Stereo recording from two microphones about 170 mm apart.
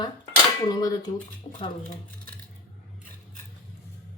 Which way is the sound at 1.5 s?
35° left (ahead or behind).